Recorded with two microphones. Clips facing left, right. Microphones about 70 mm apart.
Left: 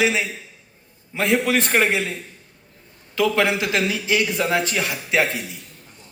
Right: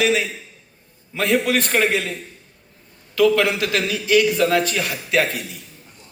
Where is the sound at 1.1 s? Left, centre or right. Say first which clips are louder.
Right 1 dB; left.